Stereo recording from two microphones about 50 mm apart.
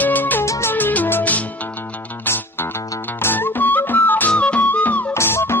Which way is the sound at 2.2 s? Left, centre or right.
Left.